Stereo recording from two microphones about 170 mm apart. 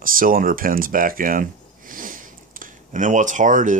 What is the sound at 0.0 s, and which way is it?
Speech, 55° right (ahead or behind).